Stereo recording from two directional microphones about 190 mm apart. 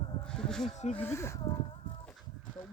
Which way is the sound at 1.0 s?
15° left (ahead or behind).